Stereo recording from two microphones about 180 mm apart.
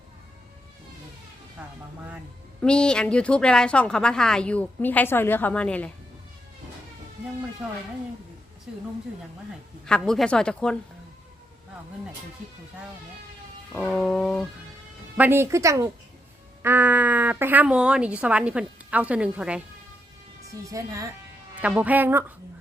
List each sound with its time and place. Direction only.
2.6 s a woman's voice: 5° left (ahead or behind)
7.6 s a woman's voice: 5° right (ahead or behind)
9.8 s a woman's voice: 5° left (ahead or behind)
13.7 s a woman's voice: 5° left (ahead or behind)
15.2 s speech: 15° right (ahead or behind)
20.7 s speech: 20° right (ahead or behind)
21.6 s speech: 10° right (ahead or behind)